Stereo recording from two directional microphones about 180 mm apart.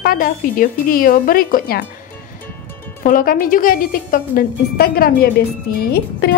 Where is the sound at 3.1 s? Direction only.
50° left (ahead or behind).